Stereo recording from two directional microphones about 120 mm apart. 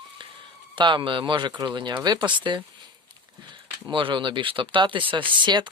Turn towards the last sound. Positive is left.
turn(degrees=-40)  # may be behind; listen again after turning